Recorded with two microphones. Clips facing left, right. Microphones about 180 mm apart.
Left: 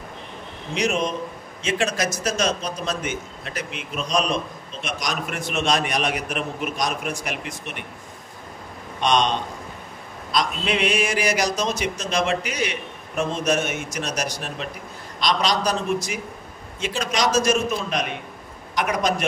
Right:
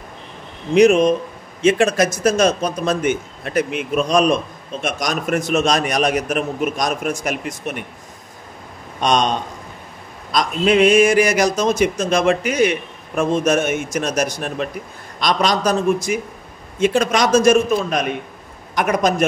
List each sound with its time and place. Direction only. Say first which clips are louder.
0.7 s a man's voice: right 12 dB; 55° right (ahead or behind)
9.0 s a man's voice: right 3 dB; 45° right (ahead or behind)